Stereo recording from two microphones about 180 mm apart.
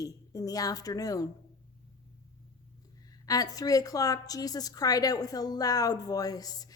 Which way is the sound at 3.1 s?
20° left (ahead or behind).